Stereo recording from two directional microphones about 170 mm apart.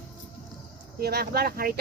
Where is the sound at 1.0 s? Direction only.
65° right (ahead or behind).